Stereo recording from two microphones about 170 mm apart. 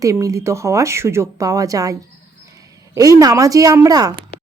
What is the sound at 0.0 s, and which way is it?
A woman's voice, 20° right (ahead or behind).